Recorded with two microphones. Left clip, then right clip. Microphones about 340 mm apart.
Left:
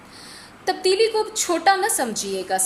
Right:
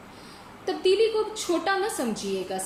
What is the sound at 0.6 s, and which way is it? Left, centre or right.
A woman's voice, left.